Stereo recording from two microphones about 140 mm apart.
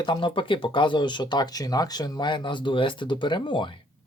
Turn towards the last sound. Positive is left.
turn(degrees=35)  # may be behind; listen again after turning